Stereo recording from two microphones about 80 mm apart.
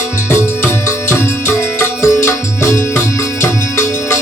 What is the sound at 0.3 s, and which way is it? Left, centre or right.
Music, left.